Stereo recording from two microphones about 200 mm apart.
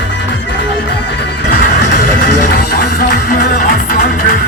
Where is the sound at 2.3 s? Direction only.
50° left (ahead or behind).